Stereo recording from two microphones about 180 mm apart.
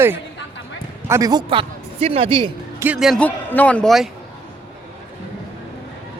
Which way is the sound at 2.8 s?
5° right (ahead or behind).